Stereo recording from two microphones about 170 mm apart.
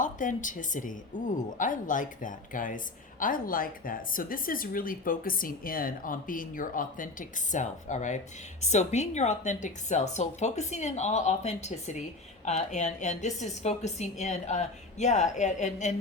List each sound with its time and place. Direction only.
0.0 s a woman's voice: 50° left (ahead or behind)